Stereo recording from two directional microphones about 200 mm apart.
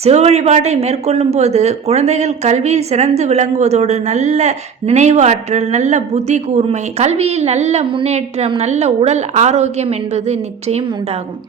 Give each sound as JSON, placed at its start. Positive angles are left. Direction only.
{"t": 0.0, "sound": "speech", "side_deg": -30}